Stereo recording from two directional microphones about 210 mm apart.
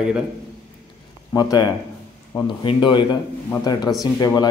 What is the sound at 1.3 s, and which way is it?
Speech, 20° left (ahead or behind).